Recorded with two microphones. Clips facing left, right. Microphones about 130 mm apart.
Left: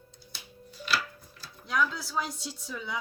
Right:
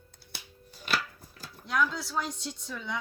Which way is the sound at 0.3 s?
50° right (ahead or behind).